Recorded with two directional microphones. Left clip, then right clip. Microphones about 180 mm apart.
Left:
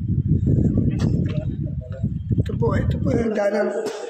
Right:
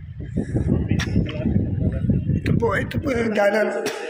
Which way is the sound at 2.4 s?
10° left (ahead or behind).